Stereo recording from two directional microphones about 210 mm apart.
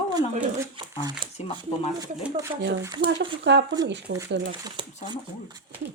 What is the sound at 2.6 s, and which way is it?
Speech, 55° right (ahead or behind).